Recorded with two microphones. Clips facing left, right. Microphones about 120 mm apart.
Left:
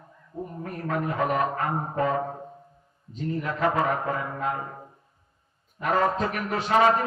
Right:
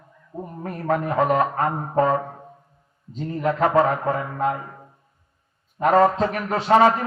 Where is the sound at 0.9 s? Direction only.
35° right (ahead or behind).